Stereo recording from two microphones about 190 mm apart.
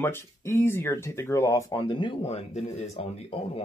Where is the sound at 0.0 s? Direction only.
10° left (ahead or behind).